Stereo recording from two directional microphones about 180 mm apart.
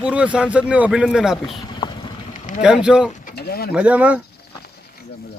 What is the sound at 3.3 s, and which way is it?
Speech, 60° left (ahead or behind).